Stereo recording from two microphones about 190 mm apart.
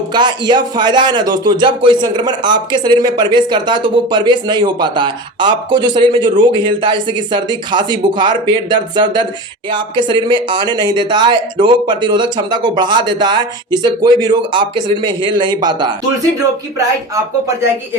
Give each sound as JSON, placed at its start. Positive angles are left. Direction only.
{"t": 0.1, "sound": "a man's voice", "side_deg": -25}